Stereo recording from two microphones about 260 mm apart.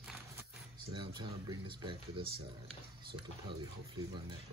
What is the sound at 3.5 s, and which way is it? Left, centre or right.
Speech, centre.